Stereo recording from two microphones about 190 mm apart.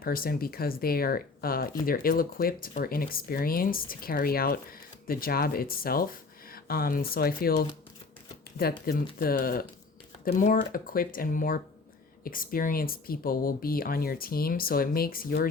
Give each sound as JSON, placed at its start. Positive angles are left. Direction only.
{"t": 0.0, "sound": "speech", "side_deg": 50}
{"t": 8.9, "sound": "speech", "side_deg": 55}